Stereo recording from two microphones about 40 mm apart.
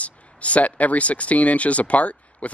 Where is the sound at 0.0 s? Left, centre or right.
Left.